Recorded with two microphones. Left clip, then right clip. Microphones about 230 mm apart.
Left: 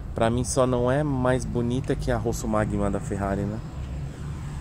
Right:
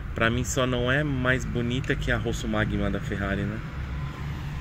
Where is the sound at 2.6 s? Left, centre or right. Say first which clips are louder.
Left 2 dB; centre.